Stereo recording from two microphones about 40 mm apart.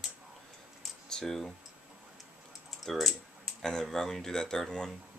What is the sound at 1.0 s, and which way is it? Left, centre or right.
Computer keyboard, centre.